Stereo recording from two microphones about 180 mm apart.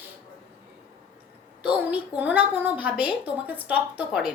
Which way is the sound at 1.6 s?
10° right (ahead or behind).